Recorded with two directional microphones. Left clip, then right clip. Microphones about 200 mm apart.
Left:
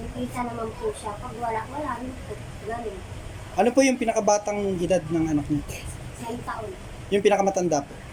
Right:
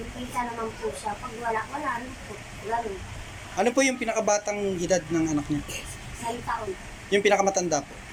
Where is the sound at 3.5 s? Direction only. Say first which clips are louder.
Left 3 dB; 10° left (ahead or behind).